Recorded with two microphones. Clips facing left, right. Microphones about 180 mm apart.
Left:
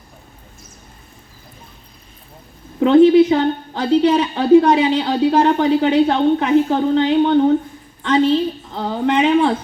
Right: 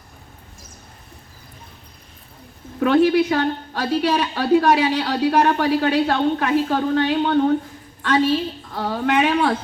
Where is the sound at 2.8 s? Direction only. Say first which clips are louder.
Left 6 dB; 20° left (ahead or behind).